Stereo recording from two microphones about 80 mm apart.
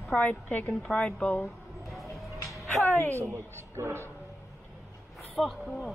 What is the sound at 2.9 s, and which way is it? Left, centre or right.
Speech, left.